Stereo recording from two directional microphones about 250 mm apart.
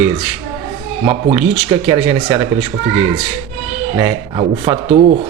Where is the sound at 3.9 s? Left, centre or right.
Centre.